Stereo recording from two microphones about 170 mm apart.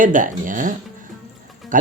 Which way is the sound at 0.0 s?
50° right (ahead or behind).